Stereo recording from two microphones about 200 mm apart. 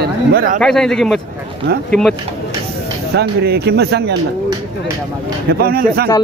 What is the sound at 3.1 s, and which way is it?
Speech, 55° right (ahead or behind).